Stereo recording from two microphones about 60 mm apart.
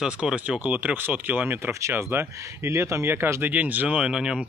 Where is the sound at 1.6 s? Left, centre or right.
Right.